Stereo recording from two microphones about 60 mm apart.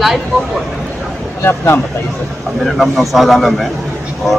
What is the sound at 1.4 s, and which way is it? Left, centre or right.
Speech, left.